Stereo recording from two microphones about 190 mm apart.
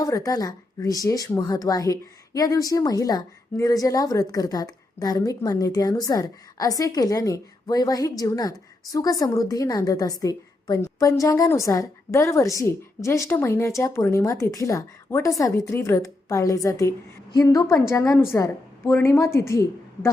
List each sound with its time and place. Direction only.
0.0 s a woman's voice: 20° left (ahead or behind)